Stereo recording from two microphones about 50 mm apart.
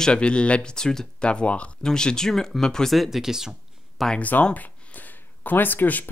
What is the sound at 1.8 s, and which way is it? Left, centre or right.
Speech, centre.